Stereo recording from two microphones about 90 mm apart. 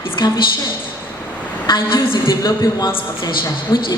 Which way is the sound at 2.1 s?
50° left (ahead or behind).